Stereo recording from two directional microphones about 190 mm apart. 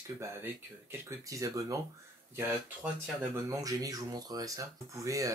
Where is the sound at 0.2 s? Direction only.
15° right (ahead or behind).